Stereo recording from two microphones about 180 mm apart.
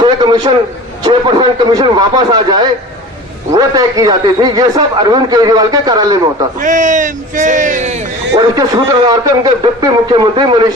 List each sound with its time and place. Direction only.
0.0 s a man's voice: 25° right (ahead or behind)
6.6 s a man's voice: 45° right (ahead or behind)
8.4 s a man's voice: 20° right (ahead or behind)